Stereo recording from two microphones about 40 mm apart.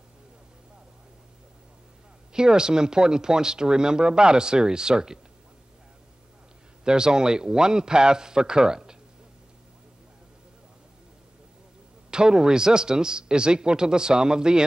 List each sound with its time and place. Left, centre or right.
2.3 s speech: centre
6.8 s speech: centre
12.1 s speech: centre